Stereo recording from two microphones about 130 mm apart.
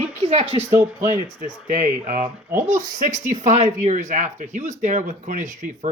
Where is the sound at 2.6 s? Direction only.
70° right (ahead or behind).